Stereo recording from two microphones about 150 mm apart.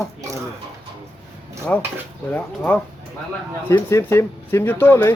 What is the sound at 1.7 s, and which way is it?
Speech, 10° left (ahead or behind).